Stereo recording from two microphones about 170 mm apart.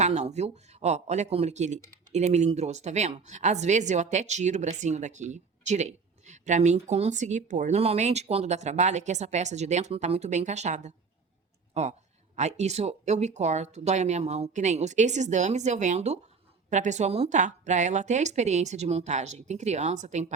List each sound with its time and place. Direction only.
0.0 s speech: 40° right (ahead or behind)